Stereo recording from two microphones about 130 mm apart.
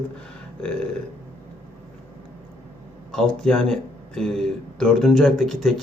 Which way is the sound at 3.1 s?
5° left (ahead or behind).